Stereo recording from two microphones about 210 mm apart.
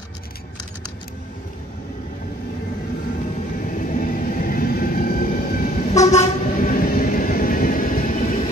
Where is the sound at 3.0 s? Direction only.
40° left (ahead or behind).